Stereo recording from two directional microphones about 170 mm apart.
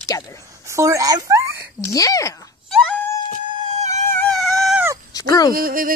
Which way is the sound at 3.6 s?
40° right (ahead or behind).